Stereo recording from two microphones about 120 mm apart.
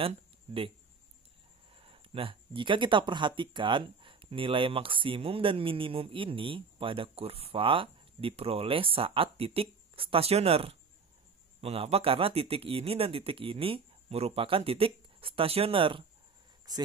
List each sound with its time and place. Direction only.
1.7 s speech: 50° right (ahead or behind)